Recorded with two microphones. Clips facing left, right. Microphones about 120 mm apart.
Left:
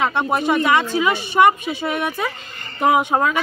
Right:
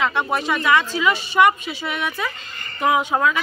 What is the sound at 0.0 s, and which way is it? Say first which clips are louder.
Speech: left 2 dB; 50° left (ahead or behind).